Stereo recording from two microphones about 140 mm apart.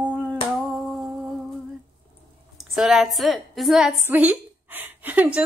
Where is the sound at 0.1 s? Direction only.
Centre (ahead or behind).